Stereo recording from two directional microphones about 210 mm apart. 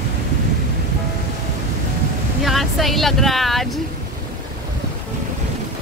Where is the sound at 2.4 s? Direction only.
Centre (ahead or behind).